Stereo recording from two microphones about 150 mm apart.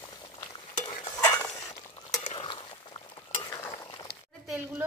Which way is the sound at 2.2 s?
35° left (ahead or behind).